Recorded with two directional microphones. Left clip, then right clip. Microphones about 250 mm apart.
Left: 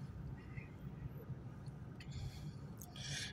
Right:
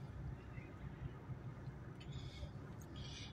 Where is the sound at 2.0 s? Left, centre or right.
Left.